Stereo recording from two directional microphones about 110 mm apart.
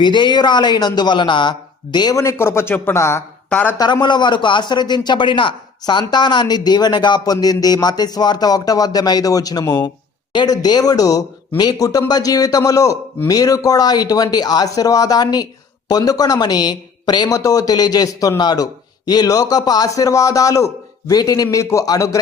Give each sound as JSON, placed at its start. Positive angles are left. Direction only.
{"t": 0.0, "sound": "a man's voice", "side_deg": 45}
{"t": 2.1, "sound": "speech", "side_deg": 25}
{"t": 4.0, "sound": "a man's voice", "side_deg": 45}